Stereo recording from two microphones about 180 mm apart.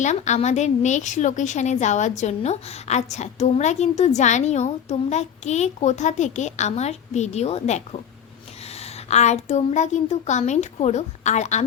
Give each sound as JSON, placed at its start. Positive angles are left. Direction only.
{"t": 0.0, "sound": "a woman's voice", "side_deg": 40}